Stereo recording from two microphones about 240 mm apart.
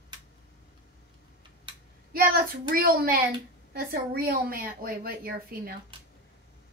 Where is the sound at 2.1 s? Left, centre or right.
Right.